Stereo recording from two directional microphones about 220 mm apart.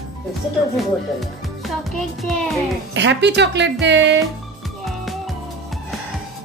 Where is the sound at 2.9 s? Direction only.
55° right (ahead or behind).